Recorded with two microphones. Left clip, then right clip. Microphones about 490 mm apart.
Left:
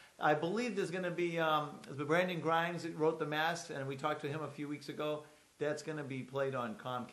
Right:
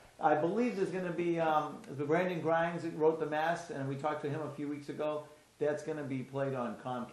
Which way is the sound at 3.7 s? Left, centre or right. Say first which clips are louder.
Right 2 dB; left.